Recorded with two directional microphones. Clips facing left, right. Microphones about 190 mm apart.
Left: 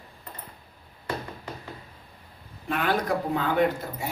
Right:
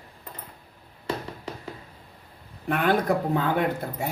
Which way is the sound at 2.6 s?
55° right (ahead or behind).